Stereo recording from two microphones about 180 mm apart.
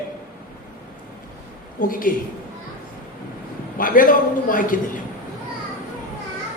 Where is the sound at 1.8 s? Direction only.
50° left (ahead or behind).